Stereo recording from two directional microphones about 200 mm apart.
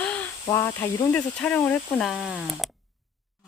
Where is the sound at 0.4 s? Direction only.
15° left (ahead or behind).